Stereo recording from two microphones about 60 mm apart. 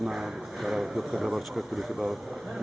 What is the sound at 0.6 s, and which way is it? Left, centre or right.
Speech, centre.